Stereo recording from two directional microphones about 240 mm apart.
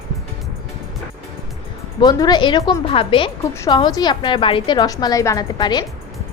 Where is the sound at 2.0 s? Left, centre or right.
Centre.